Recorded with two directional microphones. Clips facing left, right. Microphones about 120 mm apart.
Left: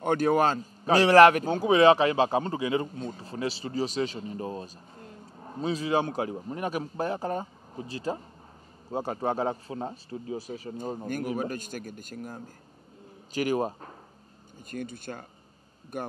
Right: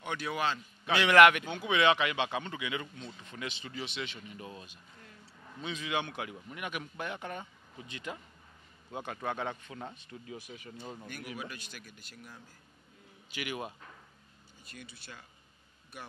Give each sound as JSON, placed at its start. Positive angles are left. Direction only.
{"t": 0.0, "sound": "a man's voice", "side_deg": 45}